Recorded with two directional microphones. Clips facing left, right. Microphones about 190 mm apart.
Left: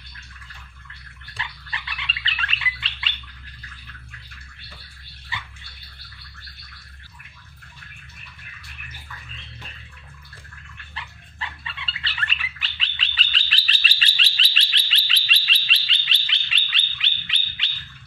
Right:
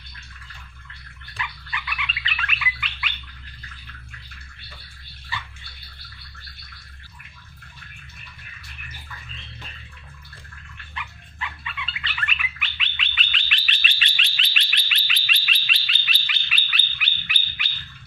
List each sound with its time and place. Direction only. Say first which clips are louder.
1.4 s dog: right 2 dB; 30° left (ahead or behind)
11.0 s dog: right 2 dB; 30° left (ahead or behind)